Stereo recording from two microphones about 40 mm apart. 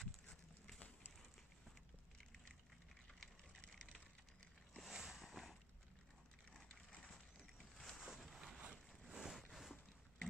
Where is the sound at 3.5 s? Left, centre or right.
Left.